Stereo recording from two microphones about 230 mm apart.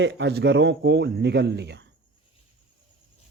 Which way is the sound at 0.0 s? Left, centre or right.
Right.